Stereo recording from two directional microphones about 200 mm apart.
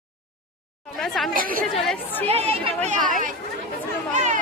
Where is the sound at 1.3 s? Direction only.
45° right (ahead or behind).